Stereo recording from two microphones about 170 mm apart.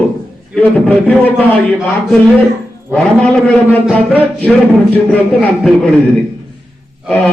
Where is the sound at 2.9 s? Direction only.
5° left (ahead or behind).